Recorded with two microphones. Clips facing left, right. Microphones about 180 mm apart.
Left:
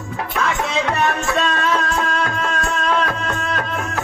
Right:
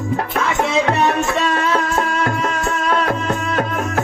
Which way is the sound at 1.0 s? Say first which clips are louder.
Right 2 dB; 10° right (ahead or behind).